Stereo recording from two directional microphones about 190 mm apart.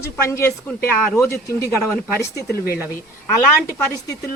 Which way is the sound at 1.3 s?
15° left (ahead or behind).